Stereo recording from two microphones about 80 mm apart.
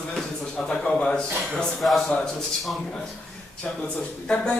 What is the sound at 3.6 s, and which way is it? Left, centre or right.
Speech, centre.